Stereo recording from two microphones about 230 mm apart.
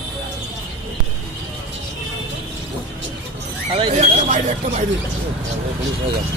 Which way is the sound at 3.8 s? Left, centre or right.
Right.